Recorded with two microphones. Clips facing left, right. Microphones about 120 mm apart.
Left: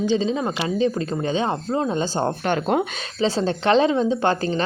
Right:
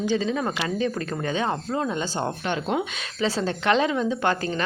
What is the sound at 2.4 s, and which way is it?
Speech, 50° left (ahead or behind).